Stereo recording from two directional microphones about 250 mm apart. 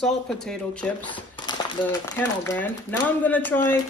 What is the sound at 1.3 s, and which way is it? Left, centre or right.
Crumpling, centre.